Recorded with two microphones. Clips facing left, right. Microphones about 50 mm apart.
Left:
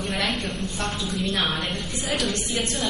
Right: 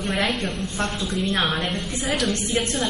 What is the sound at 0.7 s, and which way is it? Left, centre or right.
Speech, right.